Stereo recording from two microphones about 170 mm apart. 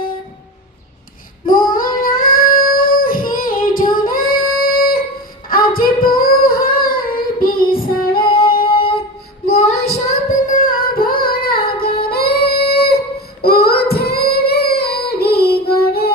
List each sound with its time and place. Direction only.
1.5 s child singing: 55° left (ahead or behind)
4.1 s a sound: 60° left (ahead or behind)
5.5 s female singing: 60° left (ahead or behind)
8.6 s music: 30° left (ahead or behind)
9.5 s child singing: 40° left (ahead or behind)
10.5 s singing: 55° left (ahead or behind)
12.0 s female singing: 65° left (ahead or behind)
13.4 s child singing: 65° left (ahead or behind)